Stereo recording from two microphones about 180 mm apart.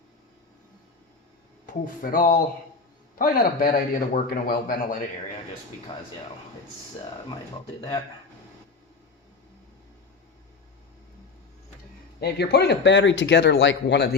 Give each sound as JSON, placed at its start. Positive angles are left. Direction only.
{"t": 1.6, "sound": "a man's voice", "side_deg": 50}
{"t": 5.9, "sound": "speech", "side_deg": 35}
{"t": 12.2, "sound": "speech", "side_deg": 65}